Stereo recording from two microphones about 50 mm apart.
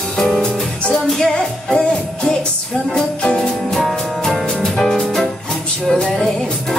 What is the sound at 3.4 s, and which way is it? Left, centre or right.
Music, centre.